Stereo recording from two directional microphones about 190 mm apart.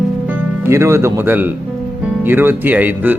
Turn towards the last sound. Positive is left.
turn(degrees=-10)  # may be behind; listen again after turning